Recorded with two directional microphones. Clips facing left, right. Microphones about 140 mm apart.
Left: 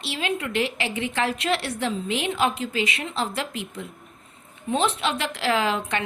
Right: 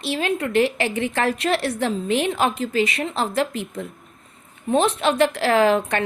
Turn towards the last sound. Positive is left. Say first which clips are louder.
# right 7 dB
turn(degrees=-45)  # may be behind; listen again after turning